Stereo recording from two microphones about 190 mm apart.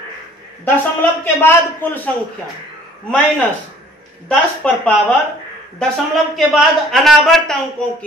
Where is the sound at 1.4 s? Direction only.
10° left (ahead or behind).